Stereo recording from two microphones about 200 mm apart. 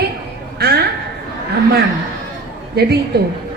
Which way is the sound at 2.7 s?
55° right (ahead or behind).